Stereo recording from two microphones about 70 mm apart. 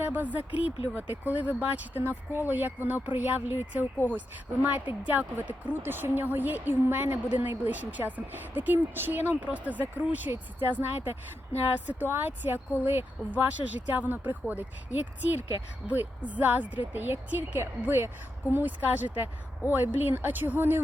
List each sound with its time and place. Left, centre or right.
0.0 s a woman's voice: right